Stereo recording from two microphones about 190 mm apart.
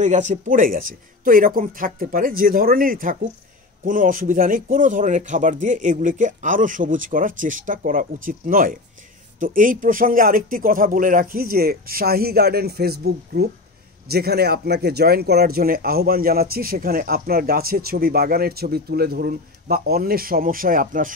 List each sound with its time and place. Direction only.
0.0 s speech: 40° right (ahead or behind)